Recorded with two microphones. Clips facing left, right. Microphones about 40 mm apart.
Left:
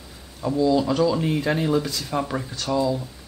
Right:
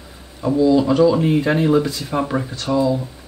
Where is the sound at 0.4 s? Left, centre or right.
Centre.